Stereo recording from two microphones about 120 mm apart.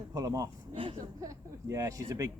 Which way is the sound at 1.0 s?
25° right (ahead or behind).